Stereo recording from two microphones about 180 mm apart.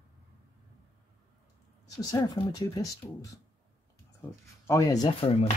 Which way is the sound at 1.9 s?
20° left (ahead or behind).